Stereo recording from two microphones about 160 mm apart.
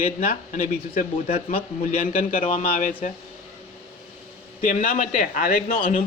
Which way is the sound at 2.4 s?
35° left (ahead or behind).